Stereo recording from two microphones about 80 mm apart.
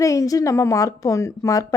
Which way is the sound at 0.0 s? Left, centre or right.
Left.